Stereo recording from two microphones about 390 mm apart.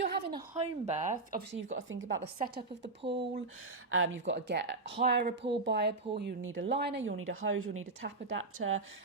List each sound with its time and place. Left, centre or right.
0.0 s a woman's voice: centre
3.0 s speech: centre
3.9 s speech: right